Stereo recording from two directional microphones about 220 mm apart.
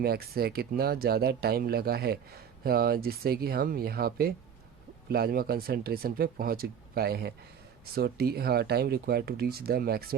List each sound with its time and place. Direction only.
0.0 s speech: 45° right (ahead or behind)